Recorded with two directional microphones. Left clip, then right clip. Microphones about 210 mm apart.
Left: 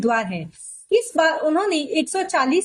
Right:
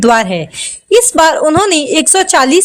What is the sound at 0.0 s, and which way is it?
A woman's voice, 55° right (ahead or behind).